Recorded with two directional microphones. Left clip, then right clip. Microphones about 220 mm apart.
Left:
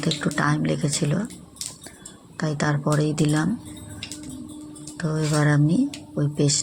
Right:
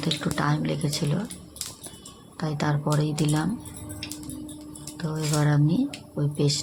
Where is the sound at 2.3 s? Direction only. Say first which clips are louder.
Left 3 dB; 15° left (ahead or behind).